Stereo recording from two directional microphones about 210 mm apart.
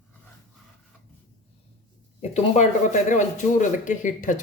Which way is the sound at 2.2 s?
30° left (ahead or behind).